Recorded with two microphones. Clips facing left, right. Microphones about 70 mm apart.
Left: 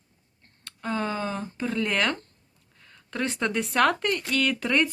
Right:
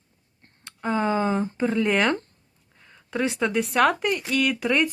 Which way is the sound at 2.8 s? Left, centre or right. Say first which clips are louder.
Right 4 dB; centre.